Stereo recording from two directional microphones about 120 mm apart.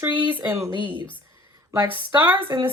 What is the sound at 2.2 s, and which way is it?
Speech, 15° right (ahead or behind).